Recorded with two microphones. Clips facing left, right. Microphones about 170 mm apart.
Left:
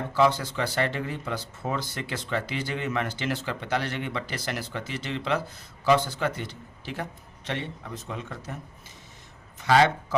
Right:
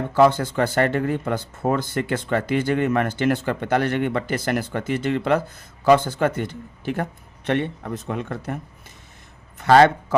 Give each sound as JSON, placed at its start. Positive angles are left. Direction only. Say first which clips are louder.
{"t": 0.1, "sound": "speech", "louder": "right 6 dB", "side_deg": -50}
{"t": 9.6, "sound": "speech", "louder": "right 7 dB", "side_deg": -55}